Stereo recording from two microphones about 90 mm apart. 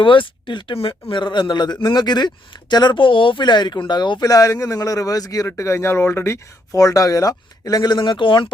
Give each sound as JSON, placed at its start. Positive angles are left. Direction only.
{"t": 0.0, "sound": "speech", "side_deg": 65}
{"t": 4.3, "sound": "speech", "side_deg": 40}